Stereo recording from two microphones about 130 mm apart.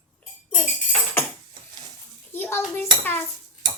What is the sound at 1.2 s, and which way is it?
A child's voice, 20° left (ahead or behind).